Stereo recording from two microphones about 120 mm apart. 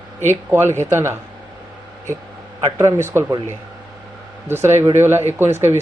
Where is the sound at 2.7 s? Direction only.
25° right (ahead or behind).